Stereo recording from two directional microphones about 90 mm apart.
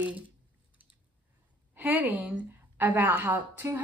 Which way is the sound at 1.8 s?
20° right (ahead or behind).